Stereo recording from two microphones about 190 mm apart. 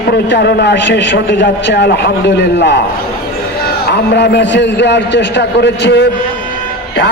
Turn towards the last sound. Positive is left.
turn(degrees=65)  # may be behind; listen again after turning